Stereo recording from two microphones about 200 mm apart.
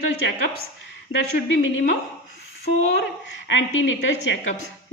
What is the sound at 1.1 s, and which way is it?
Speech, 75° left (ahead or behind).